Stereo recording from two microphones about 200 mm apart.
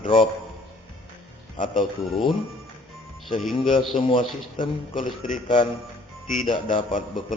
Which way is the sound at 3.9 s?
25° left (ahead or behind).